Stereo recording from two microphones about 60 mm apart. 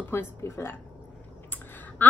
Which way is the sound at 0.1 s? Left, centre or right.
Left.